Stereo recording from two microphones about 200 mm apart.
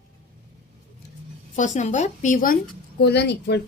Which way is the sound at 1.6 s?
35° left (ahead or behind).